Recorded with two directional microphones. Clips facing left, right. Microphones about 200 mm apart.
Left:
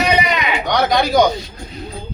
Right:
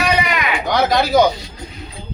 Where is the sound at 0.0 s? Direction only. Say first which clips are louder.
Left 1 dB; 20° left (ahead or behind).